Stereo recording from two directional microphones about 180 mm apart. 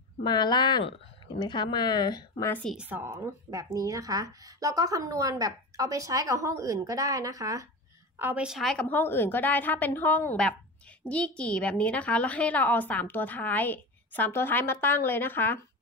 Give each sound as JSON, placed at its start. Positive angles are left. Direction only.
{"t": 0.2, "sound": "a woman's voice", "side_deg": 25}
{"t": 2.5, "sound": "a woman's voice", "side_deg": 0}
{"t": 8.2, "sound": "a woman's voice", "side_deg": -10}